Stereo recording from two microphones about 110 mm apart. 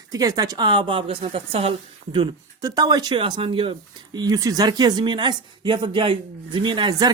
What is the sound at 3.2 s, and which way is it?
Speech, 50° right (ahead or behind).